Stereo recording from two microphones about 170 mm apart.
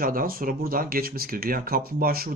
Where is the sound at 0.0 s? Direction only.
55° right (ahead or behind).